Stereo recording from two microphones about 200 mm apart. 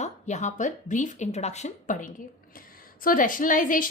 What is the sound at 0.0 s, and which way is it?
A woman's voice, 35° left (ahead or behind).